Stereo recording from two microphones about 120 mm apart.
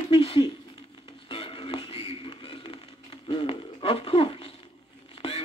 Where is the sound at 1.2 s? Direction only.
50° left (ahead or behind).